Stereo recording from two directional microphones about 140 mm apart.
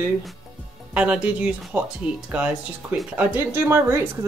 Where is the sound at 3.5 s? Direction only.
15° right (ahead or behind).